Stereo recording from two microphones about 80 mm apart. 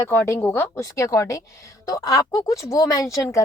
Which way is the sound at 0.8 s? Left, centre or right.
Left.